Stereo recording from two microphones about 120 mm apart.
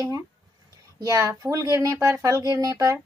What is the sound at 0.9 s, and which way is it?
Speech, 30° right (ahead or behind).